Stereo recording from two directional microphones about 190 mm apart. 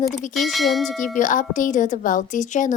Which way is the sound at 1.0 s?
40° left (ahead or behind).